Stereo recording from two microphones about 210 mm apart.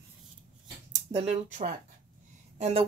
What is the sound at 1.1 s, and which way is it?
Speech, 30° right (ahead or behind).